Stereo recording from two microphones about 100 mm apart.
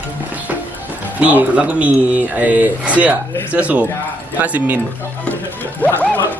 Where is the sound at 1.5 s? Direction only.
15° right (ahead or behind).